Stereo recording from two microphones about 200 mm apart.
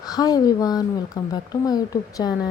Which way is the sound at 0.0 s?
20° left (ahead or behind).